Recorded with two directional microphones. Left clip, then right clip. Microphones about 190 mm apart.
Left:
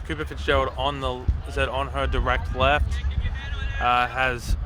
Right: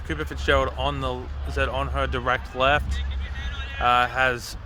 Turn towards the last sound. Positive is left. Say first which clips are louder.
# right 2 dB
turn(degrees=-5)  # may be behind; listen again after turning